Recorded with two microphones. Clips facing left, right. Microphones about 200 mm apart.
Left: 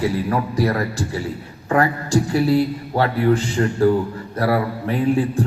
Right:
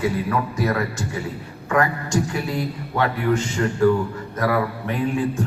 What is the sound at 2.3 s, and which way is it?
A man's voice, 35° left (ahead or behind).